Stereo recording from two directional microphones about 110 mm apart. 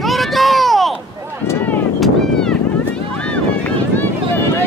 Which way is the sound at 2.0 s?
5° left (ahead or behind).